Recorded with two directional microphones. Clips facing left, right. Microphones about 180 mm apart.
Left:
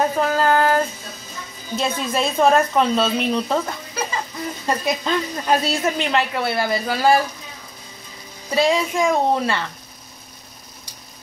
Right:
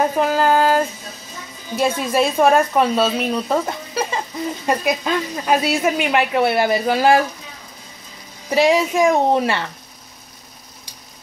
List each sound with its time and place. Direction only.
0.0 s a sound: 10° right (ahead or behind)
1.8 s speech: 10° right (ahead or behind)
4.6 s speech: 5° right (ahead or behind)
8.5 s speech: 15° right (ahead or behind)